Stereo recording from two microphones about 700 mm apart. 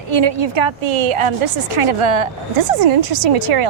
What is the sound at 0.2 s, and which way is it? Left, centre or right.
A woman's voice, right.